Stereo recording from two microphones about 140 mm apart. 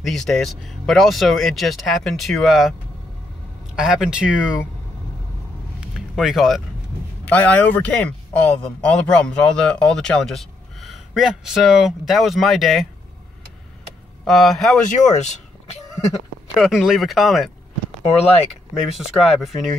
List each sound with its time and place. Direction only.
0.0 s speech: centre (ahead or behind)
3.7 s speech: 5° right (ahead or behind)
5.9 s speech: centre (ahead or behind)
7.2 s speech: 10° left (ahead or behind)
14.2 s speech: centre (ahead or behind)
14.9 s speech: 55° left (ahead or behind)
16.5 s speech: centre (ahead or behind)
18.8 s speech: centre (ahead or behind)